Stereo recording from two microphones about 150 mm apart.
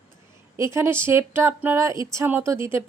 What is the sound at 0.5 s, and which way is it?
A woman's voice, 20° right (ahead or behind).